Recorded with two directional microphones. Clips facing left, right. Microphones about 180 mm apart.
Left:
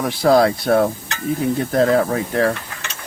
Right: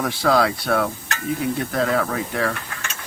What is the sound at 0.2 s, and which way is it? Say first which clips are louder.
Speech: left 5 dB; 25° left (ahead or behind).